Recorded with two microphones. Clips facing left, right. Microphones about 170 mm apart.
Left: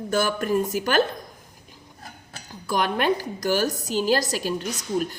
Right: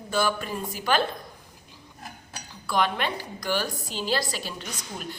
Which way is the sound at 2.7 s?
45° left (ahead or behind).